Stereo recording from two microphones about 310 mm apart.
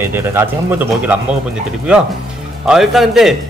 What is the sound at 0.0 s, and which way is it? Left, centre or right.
A man's voice, centre.